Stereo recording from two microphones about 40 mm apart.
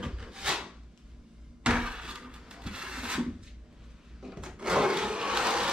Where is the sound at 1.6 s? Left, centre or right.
Right.